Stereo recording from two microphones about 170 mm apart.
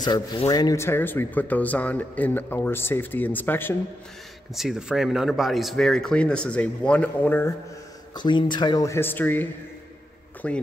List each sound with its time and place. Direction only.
0.0 s speech: 25° left (ahead or behind)
4.6 s speech: 5° right (ahead or behind)
8.1 s speech: 25° left (ahead or behind); by 10.6 s 5° left (ahead or behind)